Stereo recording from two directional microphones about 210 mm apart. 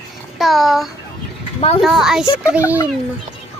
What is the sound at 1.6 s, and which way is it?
Speech, 25° left (ahead or behind).